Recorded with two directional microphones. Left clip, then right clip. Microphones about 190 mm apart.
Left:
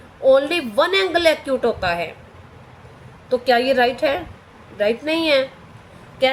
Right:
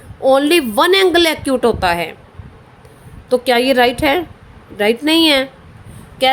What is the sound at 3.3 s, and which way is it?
A woman's voice, 60° right (ahead or behind).